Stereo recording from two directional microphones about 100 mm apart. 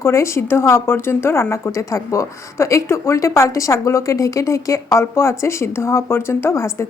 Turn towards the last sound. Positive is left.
turn(degrees=30)  # may be behind; listen again after turning